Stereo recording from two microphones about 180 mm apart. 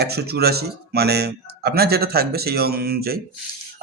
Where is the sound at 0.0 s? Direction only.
60° right (ahead or behind).